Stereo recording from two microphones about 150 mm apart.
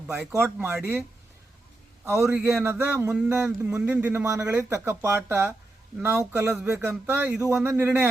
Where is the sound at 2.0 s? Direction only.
20° right (ahead or behind).